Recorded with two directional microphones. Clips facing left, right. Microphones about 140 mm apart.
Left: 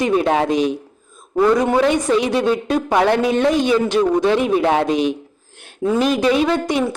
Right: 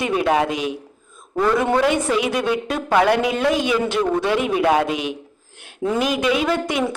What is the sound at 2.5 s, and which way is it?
A man's voice, 35° left (ahead or behind).